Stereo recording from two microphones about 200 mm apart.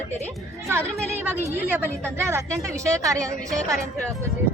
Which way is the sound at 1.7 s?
10° right (ahead or behind).